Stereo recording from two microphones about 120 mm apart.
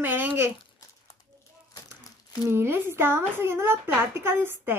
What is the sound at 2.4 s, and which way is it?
A woman's voice, 20° right (ahead or behind).